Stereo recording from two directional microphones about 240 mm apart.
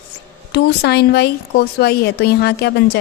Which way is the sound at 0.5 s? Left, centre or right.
Left.